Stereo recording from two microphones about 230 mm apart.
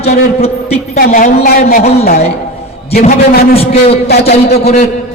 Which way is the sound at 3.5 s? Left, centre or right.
Left.